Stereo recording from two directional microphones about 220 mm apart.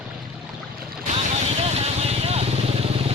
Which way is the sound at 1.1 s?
30° right (ahead or behind).